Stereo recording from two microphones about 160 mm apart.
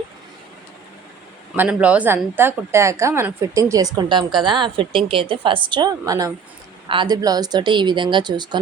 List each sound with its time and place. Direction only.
1.5 s a woman's voice: 10° right (ahead or behind); by 8.5 s 25° right (ahead or behind)